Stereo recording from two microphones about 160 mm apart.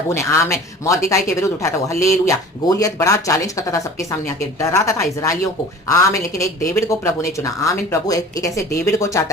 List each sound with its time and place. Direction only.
0.1 s speech: 20° left (ahead or behind)